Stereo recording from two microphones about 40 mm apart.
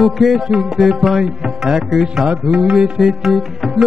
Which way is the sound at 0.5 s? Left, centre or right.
Centre.